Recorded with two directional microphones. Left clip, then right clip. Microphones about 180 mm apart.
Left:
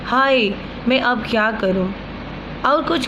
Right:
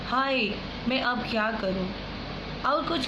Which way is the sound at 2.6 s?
50° left (ahead or behind).